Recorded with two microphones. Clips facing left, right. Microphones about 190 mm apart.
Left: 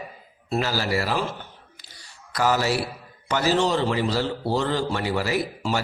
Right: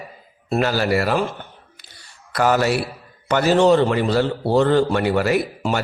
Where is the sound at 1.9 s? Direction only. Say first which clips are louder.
Right 6 dB; 60° right (ahead or behind).